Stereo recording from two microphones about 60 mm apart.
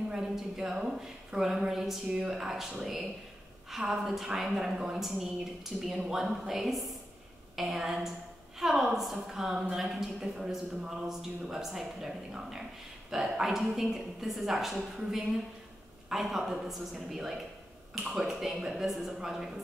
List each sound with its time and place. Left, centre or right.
0.1 s a woman's voice: centre